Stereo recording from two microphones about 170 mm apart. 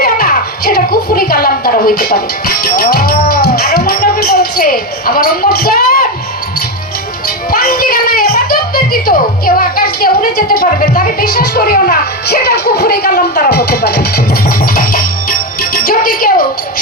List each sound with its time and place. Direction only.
0.0 s a sound: 60° left (ahead or behind)
7.5 s music: 60° left (ahead or behind)
9.6 s speech: 60° left (ahead or behind)
15.9 s music: 55° left (ahead or behind)